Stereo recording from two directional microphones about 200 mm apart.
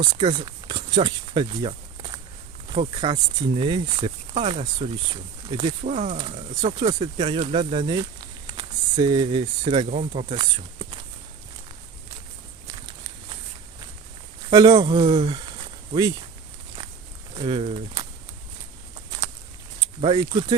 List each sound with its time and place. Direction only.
0.0 s speech: 25° right (ahead or behind)
6.1 s speech: 25° right (ahead or behind)
10.0 s speech: 35° right (ahead or behind)
10.2 s speech: 25° right (ahead or behind)
14.5 s speech: 20° right (ahead or behind)
17.3 s speech: 25° right (ahead or behind)
19.8 s speech: 25° right (ahead or behind)